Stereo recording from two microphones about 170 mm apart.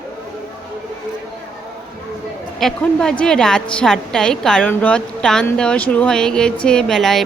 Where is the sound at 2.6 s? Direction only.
Centre (ahead or behind).